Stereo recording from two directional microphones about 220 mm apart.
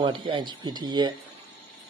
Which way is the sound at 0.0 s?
20° right (ahead or behind).